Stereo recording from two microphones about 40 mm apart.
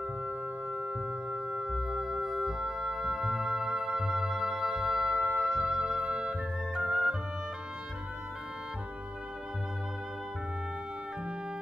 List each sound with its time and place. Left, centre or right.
0.7 s singing bowl: right
1.5 s music: right
1.9 s music: centre